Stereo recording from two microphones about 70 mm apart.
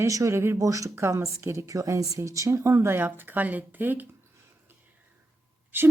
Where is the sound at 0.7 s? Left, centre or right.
Right.